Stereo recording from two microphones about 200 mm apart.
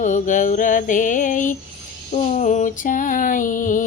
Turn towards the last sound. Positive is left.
turn(degrees=40)  # may be behind; listen again after turning